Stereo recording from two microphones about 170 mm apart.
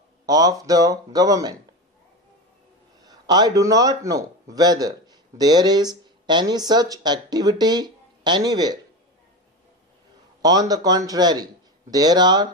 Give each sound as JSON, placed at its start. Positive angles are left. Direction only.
{"t": 0.3, "sound": "speech", "side_deg": -20}
{"t": 3.0, "sound": "a man's voice", "side_deg": -25}
{"t": 10.4, "sound": "speech", "side_deg": -20}